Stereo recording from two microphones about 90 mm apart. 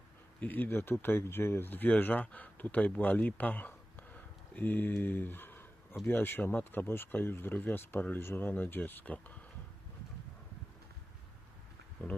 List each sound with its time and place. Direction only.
0.3 s speech: 20° left (ahead or behind)